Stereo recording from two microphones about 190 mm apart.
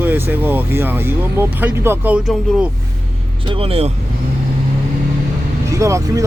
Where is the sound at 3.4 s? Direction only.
30° right (ahead or behind).